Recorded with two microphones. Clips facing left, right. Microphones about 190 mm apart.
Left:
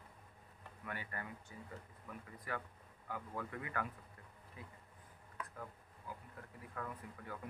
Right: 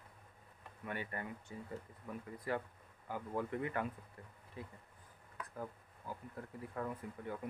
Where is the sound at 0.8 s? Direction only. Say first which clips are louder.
Right 4 dB; 25° right (ahead or behind).